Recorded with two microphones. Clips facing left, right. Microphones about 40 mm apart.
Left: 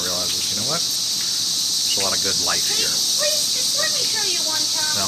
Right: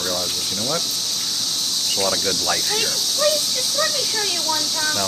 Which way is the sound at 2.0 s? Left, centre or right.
Centre.